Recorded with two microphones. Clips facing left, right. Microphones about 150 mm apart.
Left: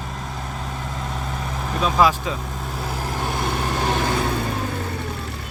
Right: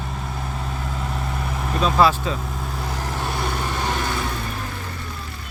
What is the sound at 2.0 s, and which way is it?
Speech, 10° left (ahead or behind).